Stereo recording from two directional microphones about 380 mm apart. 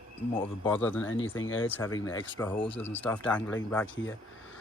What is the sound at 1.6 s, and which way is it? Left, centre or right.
Speech, centre.